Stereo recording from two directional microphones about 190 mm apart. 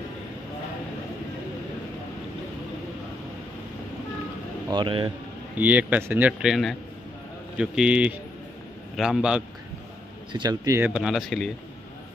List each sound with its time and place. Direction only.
4.6 s speech: 25° right (ahead or behind)
5.6 s speech: 10° right (ahead or behind)
10.3 s speech: 20° right (ahead or behind)
10.9 s speech: centre (ahead or behind)